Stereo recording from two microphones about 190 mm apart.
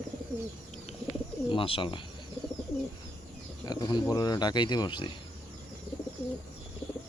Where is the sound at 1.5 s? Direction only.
30° left (ahead or behind).